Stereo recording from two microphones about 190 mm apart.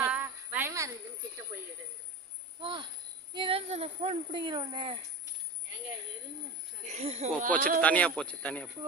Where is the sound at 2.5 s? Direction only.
25° right (ahead or behind).